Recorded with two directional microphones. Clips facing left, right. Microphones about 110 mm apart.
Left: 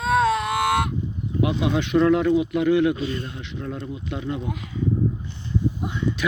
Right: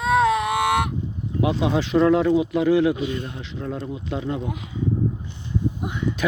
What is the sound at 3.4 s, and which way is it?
Speech, 30° right (ahead or behind).